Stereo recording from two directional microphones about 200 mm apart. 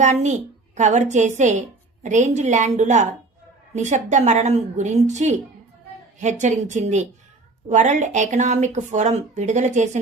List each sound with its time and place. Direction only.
0.0 s speech: 35° right (ahead or behind)